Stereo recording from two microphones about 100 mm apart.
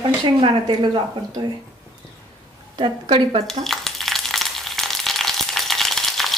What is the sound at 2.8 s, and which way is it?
Speech, 60° right (ahead or behind).